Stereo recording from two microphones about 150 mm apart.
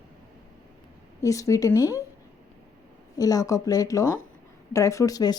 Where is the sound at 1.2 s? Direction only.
20° left (ahead or behind).